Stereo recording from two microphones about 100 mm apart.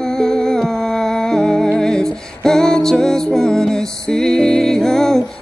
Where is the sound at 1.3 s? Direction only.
5° left (ahead or behind).